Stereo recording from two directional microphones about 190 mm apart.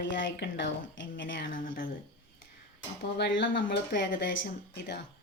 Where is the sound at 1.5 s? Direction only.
45° left (ahead or behind).